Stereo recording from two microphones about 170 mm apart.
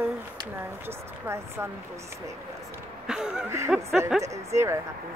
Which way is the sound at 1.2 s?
15° right (ahead or behind).